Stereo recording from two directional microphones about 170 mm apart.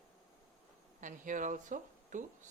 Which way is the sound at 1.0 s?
50° right (ahead or behind).